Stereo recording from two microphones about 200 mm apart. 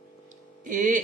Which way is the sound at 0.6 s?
40° right (ahead or behind).